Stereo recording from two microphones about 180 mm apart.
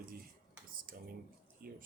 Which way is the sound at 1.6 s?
55° right (ahead or behind).